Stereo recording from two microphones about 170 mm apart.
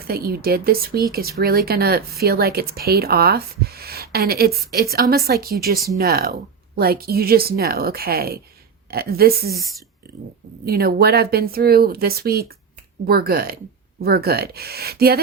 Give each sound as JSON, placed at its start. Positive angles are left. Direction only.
{"t": 0.0, "sound": "speech", "side_deg": -60}
{"t": 9.6, "sound": "speech", "side_deg": 0}
{"t": 10.7, "sound": "speech", "side_deg": -65}